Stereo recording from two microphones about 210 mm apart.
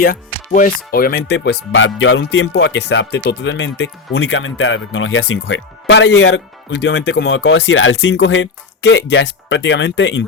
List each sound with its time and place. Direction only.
0.0 s speech: 40° left (ahead or behind); by 6.4 s 75° left (ahead or behind)
6.7 s speech: 55° left (ahead or behind)